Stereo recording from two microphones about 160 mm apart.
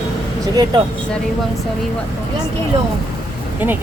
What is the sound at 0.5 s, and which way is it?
Speech, 25° right (ahead or behind).